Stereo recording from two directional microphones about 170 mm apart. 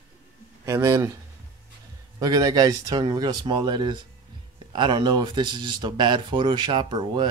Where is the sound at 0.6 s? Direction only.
20° right (ahead or behind).